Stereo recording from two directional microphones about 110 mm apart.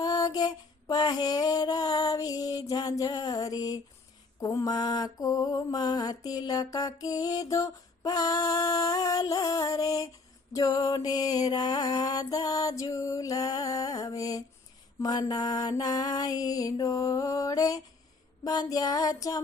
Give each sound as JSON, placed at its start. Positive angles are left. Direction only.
{"t": 0.0, "sound": "music", "side_deg": 35}
{"t": 4.4, "sound": "mantra", "side_deg": 35}